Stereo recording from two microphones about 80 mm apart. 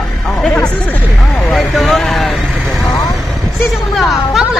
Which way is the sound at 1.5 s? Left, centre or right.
Centre.